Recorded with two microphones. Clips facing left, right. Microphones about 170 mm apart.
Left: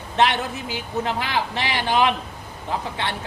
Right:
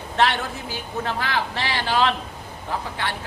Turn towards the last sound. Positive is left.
turn(degrees=20)  # may be behind; listen again after turning